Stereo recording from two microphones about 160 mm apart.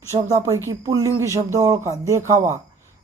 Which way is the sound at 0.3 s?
20° right (ahead or behind).